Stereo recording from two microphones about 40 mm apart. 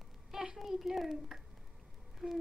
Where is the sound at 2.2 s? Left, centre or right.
Centre.